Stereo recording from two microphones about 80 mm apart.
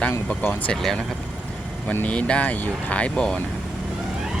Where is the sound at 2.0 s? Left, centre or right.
Centre.